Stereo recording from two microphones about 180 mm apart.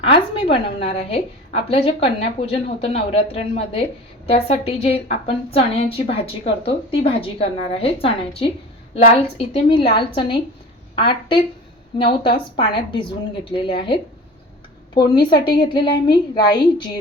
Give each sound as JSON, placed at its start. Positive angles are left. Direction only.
{"t": 0.0, "sound": "a woman's voice", "side_deg": 30}
{"t": 12.5, "sound": "a woman's voice", "side_deg": 25}